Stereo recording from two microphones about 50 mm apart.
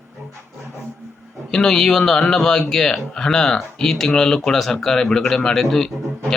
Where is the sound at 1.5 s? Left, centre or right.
Centre.